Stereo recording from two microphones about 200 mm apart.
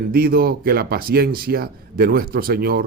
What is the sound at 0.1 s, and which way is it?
Speech, 50° right (ahead or behind).